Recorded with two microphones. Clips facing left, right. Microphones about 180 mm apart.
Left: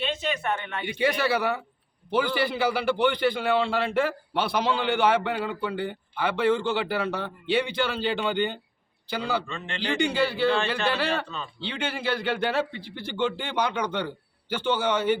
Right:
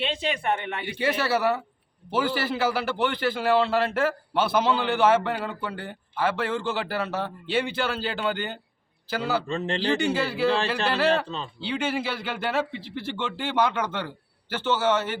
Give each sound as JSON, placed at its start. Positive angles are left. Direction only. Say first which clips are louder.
{"t": 0.0, "sound": "a man's voice", "louder": "right 1 dB", "side_deg": -30}
{"t": 0.9, "sound": "a man's voice", "louder": "left 1 dB", "side_deg": -5}
{"t": 9.5, "sound": "a man's voice", "louder": "right 5 dB", "side_deg": -40}
{"t": 10.0, "sound": "a man's voice", "louder": "even", "side_deg": 0}